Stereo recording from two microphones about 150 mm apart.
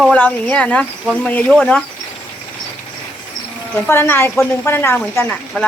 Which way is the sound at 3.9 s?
15° left (ahead or behind).